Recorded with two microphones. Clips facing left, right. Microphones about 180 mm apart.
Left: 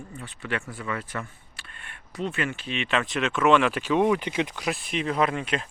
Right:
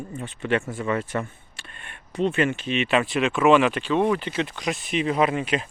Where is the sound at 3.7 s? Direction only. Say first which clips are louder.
Even; 10° left (ahead or behind).